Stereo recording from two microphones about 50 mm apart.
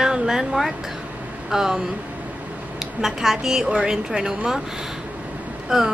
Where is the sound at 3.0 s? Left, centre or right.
Centre.